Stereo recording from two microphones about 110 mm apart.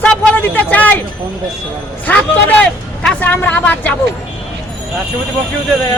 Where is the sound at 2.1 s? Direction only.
15° left (ahead or behind).